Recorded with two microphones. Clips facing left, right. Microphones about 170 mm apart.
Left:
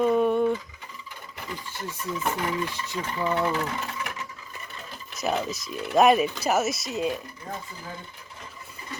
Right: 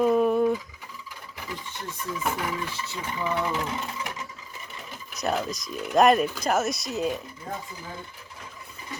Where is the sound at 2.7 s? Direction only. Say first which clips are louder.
Even; 15° left (ahead or behind).